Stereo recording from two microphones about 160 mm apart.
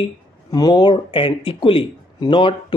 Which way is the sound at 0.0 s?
25° left (ahead or behind).